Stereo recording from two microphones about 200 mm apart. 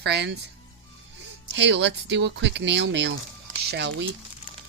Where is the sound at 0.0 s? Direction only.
55° right (ahead or behind).